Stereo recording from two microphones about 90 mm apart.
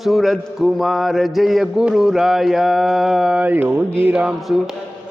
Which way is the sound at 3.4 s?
20° right (ahead or behind).